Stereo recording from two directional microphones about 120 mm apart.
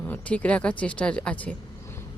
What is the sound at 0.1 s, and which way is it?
Speech, 10° left (ahead or behind).